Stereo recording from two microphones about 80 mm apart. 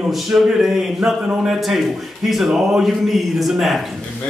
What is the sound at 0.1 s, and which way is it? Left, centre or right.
A man's voice, centre.